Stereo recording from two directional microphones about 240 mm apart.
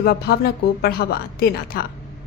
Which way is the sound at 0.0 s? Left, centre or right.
Left.